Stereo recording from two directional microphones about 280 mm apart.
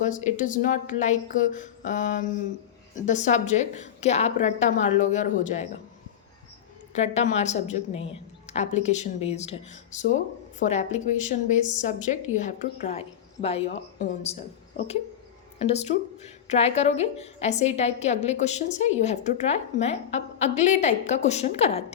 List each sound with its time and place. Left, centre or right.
0.3 s a woman's voice: left
6.9 s a woman's voice: left
15.5 s a woman's voice: left